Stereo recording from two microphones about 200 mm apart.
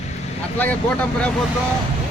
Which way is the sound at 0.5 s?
10° left (ahead or behind).